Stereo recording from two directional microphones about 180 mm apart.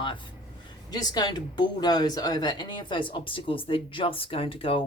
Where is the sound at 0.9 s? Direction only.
20° left (ahead or behind).